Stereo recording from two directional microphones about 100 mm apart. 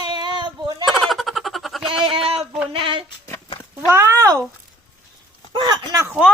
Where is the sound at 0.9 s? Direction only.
Centre (ahead or behind).